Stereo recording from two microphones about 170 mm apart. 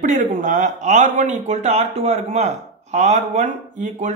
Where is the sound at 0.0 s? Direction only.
45° right (ahead or behind).